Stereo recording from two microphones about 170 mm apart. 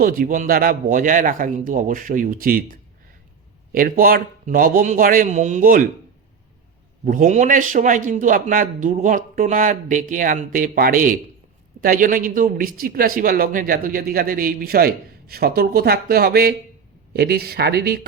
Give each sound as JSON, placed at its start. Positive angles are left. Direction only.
{"t": 0.0, "sound": "a man's voice", "side_deg": -55}
{"t": 7.0, "sound": "a man's voice", "side_deg": -50}